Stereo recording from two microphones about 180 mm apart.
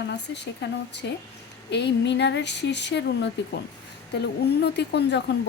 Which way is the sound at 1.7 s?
75° left (ahead or behind).